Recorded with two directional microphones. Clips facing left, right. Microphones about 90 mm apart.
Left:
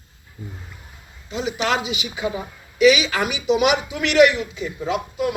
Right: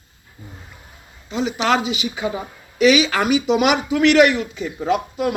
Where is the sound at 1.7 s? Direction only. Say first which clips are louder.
Right 4 dB; 35° right (ahead or behind).